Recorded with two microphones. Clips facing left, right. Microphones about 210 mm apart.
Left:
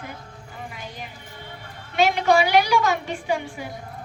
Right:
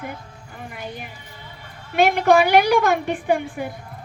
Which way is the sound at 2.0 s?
55° right (ahead or behind).